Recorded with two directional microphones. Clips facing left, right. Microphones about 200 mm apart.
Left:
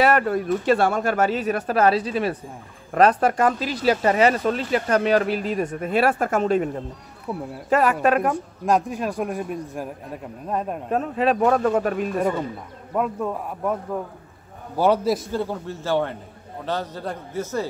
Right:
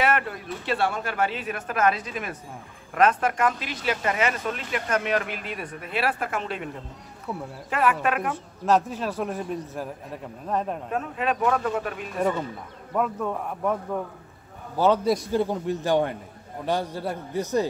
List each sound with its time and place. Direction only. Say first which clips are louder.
0.0 s speech: left 6 dB; 40° left (ahead or behind)
7.3 s a man's voice: left 3 dB; 10° left (ahead or behind)
7.7 s speech: left 5 dB; 40° left (ahead or behind)
8.6 s a man's voice: left 1 dB; 15° left (ahead or behind)
10.9 s speech: left 10 dB; 35° left (ahead or behind)
12.9 s a man's voice: left 2 dB; 5° left (ahead or behind)
15.3 s a man's voice: right 2 dB; 15° right (ahead or behind)